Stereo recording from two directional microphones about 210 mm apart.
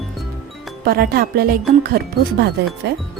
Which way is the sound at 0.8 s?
45° right (ahead or behind).